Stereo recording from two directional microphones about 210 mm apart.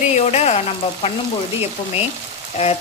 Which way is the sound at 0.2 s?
30° left (ahead or behind).